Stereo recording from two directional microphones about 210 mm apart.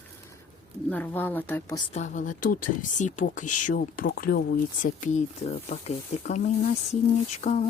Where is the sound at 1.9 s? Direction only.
35° left (ahead or behind).